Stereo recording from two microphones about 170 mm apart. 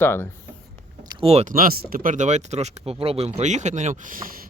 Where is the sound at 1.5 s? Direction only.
60° right (ahead or behind).